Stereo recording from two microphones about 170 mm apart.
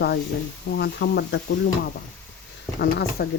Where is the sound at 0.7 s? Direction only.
85° left.